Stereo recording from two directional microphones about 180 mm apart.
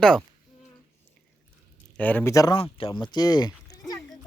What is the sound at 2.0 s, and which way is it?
Speech, 10° left (ahead or behind).